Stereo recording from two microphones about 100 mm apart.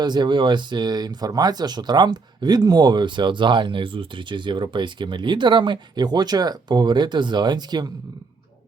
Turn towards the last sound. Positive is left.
turn(degrees=-45)  # may be behind; listen again after turning